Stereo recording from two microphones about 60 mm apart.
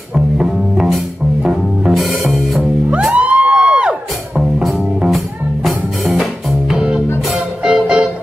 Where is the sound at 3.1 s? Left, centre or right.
Right.